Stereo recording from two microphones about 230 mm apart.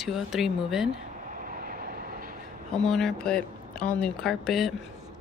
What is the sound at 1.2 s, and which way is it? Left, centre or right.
Vehicle, right.